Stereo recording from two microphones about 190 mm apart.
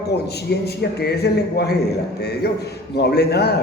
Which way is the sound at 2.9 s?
60° left (ahead or behind).